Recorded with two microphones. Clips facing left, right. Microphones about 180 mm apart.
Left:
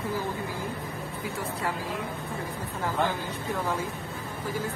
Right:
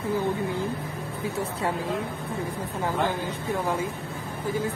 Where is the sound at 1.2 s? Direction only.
25° right (ahead or behind).